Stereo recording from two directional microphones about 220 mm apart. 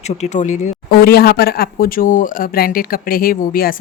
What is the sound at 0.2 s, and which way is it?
Speech, 35° left (ahead or behind).